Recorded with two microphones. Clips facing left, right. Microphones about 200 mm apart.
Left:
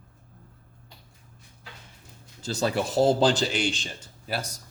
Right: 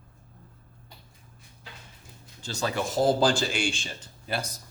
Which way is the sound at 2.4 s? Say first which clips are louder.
Left 3 dB; 35° left (ahead or behind).